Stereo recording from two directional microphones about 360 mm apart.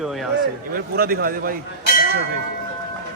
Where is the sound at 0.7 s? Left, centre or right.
Right.